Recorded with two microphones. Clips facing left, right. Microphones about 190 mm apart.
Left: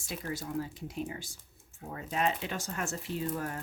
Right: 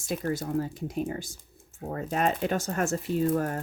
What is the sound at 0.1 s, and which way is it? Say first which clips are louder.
Speech: right 7 dB; 45° right (ahead or behind).